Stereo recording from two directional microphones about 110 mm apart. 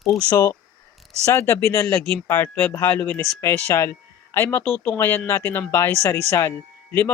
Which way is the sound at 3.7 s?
25° left (ahead or behind).